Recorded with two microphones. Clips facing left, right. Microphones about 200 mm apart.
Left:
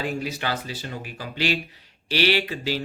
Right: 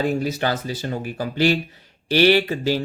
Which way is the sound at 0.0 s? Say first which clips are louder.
Right 6 dB; 40° right (ahead or behind).